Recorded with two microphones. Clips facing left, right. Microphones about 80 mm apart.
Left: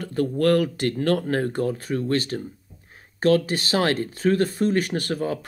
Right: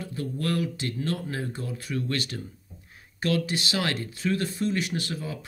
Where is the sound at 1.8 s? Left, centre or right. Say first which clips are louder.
Left 6 dB; left.